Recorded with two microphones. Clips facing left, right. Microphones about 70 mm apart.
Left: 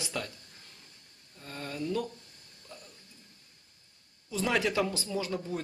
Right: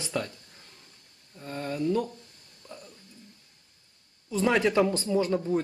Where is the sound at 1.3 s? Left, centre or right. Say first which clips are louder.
Right 6 dB; centre.